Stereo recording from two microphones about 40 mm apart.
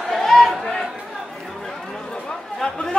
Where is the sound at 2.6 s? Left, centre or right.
Centre.